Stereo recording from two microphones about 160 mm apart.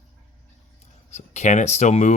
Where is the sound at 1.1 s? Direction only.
45° left (ahead or behind).